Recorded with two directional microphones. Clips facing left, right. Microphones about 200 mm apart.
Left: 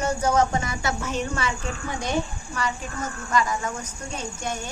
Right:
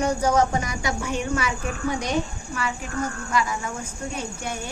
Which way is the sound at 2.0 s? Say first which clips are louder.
Right 1 dB; 35° left (ahead or behind).